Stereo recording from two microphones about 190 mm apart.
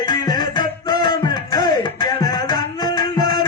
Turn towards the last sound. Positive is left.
turn(degrees=20)  # may be behind; listen again after turning